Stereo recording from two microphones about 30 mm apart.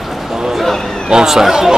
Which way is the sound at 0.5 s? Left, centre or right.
Centre.